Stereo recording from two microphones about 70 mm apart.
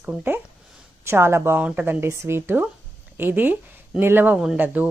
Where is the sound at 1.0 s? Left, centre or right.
Right.